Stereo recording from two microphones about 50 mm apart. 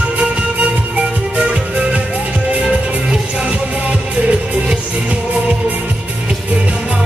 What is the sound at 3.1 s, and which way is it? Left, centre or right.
Music, centre.